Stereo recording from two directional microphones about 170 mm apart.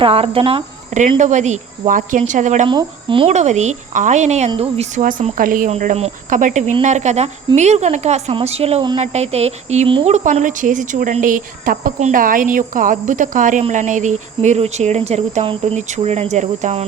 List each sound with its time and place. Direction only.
0.0 s a woman's voice: 35° right (ahead or behind)
1.2 s a woman's voice: 45° right (ahead or behind)
2.6 s speech: 30° right (ahead or behind)
3.2 s a woman's voice: 45° right (ahead or behind)
10.2 s a woman's voice: 50° right (ahead or behind)